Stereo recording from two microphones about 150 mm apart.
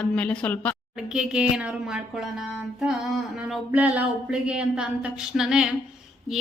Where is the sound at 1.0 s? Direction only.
5° right (ahead or behind).